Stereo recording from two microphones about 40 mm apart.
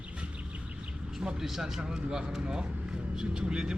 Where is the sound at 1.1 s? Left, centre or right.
Centre.